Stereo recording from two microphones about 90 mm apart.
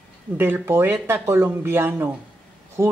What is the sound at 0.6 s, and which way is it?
Speech, 25° right (ahead or behind).